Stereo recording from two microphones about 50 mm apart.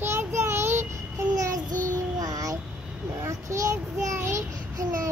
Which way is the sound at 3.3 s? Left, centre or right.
Right.